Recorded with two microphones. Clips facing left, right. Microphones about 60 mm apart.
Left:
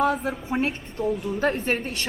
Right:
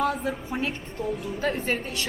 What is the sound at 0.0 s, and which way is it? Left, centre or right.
A woman's voice, left.